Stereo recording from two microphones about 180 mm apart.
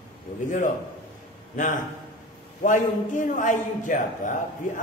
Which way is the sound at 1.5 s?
45° left (ahead or behind).